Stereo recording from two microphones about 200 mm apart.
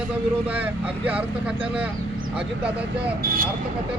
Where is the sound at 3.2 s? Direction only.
45° right (ahead or behind).